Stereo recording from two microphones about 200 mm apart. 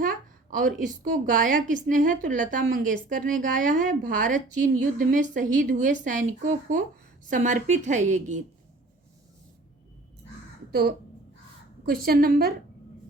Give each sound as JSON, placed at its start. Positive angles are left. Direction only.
{"t": 0.0, "sound": "a woman's voice", "side_deg": -45}
{"t": 10.7, "sound": "speech", "side_deg": -50}
{"t": 12.0, "sound": "a woman's voice", "side_deg": -50}